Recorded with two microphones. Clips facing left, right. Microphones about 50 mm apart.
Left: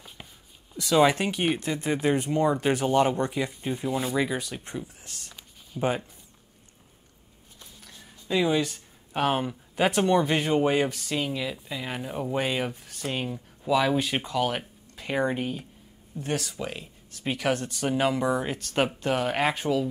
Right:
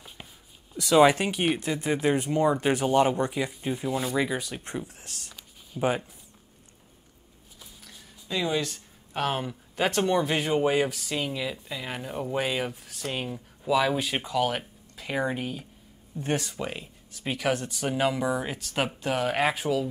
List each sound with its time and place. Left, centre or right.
0.8 s speech: centre
4.4 s speech: centre
5.3 s a sound: centre
7.6 s speech: centre
16.2 s speech: centre
16.8 s speech: centre